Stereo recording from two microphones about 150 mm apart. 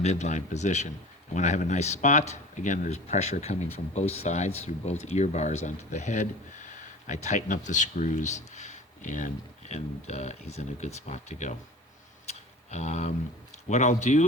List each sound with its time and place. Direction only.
0.0 s speech: 50° left (ahead or behind)
12.3 s a sound: 50° left (ahead or behind)
13.7 s speech: 50° left (ahead or behind)